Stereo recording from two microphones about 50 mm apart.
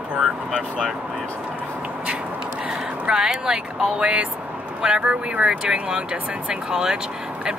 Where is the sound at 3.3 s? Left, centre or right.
Centre.